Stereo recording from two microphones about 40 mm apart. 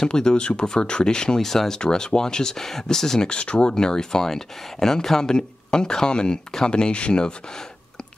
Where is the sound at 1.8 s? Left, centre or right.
Left.